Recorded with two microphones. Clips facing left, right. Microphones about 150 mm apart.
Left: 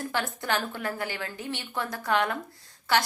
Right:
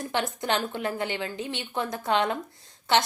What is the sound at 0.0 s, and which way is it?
A woman's voice, 20° right (ahead or behind).